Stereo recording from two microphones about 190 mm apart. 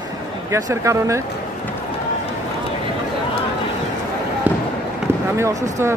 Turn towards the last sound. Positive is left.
turn(degrees=-15)  # may be behind; listen again after turning